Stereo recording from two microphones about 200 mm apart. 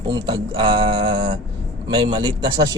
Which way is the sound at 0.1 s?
25° right (ahead or behind).